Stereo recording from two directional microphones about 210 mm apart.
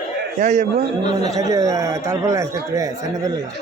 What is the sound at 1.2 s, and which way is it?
Speech, 15° right (ahead or behind).